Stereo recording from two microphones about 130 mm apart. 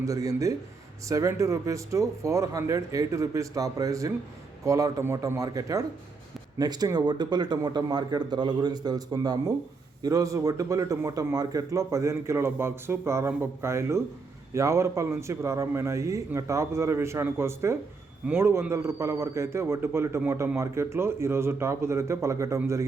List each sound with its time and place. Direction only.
0.0 s a man's voice: 25° right (ahead or behind)